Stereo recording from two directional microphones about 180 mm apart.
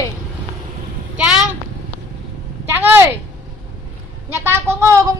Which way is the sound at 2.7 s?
10° right (ahead or behind).